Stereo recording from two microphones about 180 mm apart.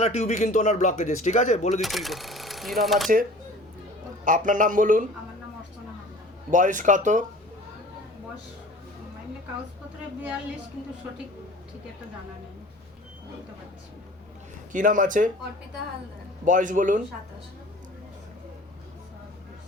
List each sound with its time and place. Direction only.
0.0 s speech: 35° left (ahead or behind)
1.8 s speech: centre (ahead or behind)
4.3 s speech: 45° right (ahead or behind)
6.5 s speech: 45° right (ahead or behind)
14.7 s speech: 45° right (ahead or behind)
16.5 s speech: 45° right (ahead or behind)